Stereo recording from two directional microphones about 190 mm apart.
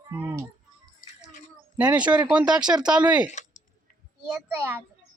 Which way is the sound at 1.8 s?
5° right (ahead or behind).